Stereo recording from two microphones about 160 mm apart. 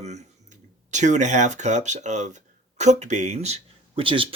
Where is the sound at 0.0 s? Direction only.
45° right (ahead or behind).